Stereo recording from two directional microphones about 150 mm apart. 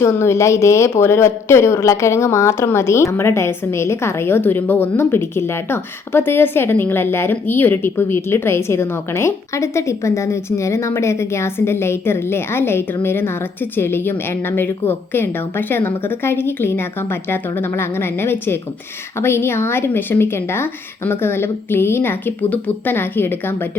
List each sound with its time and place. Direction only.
0.0 s a woman's voice: 20° left (ahead or behind)